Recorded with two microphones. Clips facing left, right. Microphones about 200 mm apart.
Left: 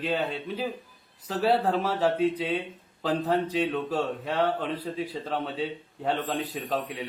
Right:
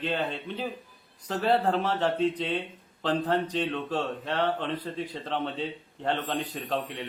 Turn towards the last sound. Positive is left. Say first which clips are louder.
# left 1 dB
turn(degrees=5)  # may be behind; listen again after turning